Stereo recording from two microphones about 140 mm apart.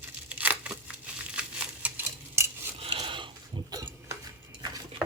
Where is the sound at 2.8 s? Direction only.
40° right (ahead or behind).